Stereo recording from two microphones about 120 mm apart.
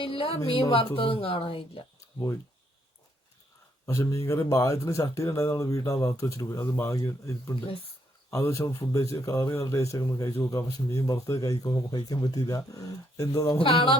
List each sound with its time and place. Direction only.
0.0 s a woman's voice: 50° left (ahead or behind)
3.8 s speech: 25° left (ahead or behind)
13.6 s a woman's voice: 50° left (ahead or behind)